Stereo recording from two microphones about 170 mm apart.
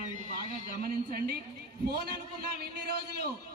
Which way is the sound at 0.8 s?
60° right (ahead or behind).